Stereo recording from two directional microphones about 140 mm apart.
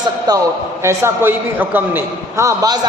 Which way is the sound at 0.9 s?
15° right (ahead or behind).